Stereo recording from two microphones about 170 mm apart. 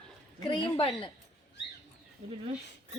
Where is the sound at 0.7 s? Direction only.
30° left (ahead or behind).